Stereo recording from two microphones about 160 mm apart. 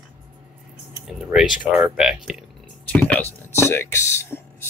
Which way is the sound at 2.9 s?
10° left (ahead or behind).